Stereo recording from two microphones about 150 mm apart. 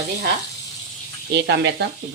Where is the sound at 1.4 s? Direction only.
90° right.